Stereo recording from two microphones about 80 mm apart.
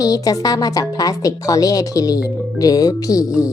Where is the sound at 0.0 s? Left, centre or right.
Left.